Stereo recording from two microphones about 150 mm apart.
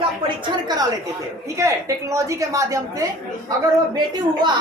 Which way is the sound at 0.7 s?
25° right (ahead or behind).